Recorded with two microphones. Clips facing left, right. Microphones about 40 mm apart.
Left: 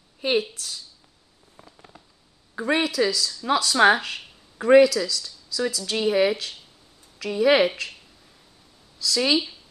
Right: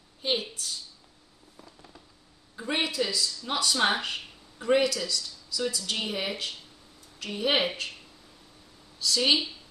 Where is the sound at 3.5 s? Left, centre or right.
Left.